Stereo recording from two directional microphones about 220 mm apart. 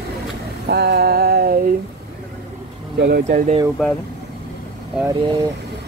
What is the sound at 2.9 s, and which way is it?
Speech, 45° right (ahead or behind).